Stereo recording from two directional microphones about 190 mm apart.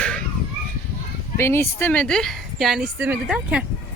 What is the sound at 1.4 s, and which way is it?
Speech, 15° left (ahead or behind).